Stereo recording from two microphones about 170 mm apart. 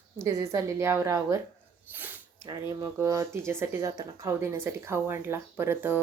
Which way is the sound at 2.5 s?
20° right (ahead or behind).